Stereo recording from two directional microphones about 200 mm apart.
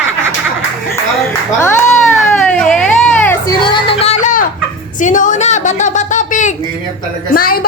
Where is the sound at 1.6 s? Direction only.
10° left (ahead or behind).